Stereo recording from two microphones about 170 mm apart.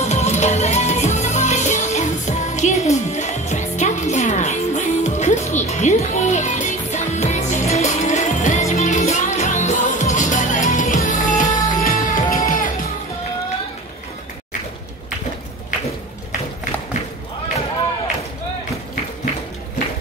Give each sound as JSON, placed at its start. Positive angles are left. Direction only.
{"t": 0.0, "sound": "music", "side_deg": 40}